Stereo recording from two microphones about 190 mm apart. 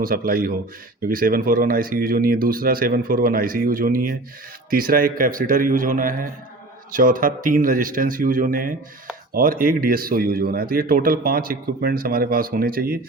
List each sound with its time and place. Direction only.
0.0 s speech: 50° right (ahead or behind)